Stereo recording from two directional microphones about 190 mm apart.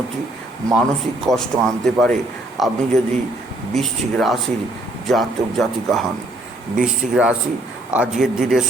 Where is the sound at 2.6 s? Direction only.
Centre (ahead or behind).